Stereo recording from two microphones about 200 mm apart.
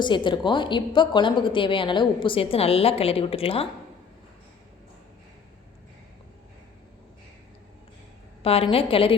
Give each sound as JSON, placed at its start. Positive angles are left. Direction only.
{"t": 0.0, "sound": "a woman's voice", "side_deg": 25}
{"t": 8.4, "sound": "a woman's voice", "side_deg": 30}